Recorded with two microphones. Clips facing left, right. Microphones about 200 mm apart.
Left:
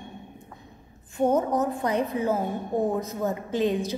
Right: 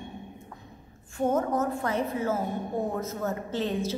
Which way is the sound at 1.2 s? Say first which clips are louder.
Left 3 dB; 20° left (ahead or behind).